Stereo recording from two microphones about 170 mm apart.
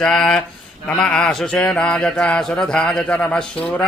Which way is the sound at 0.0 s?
5° left (ahead or behind).